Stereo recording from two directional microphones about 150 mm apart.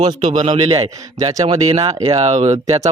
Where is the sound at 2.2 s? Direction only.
45° right (ahead or behind).